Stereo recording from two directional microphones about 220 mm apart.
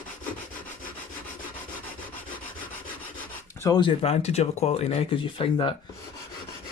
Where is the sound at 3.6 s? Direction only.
20° left (ahead or behind).